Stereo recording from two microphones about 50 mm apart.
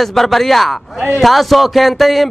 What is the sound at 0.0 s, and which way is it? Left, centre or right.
Speech, centre.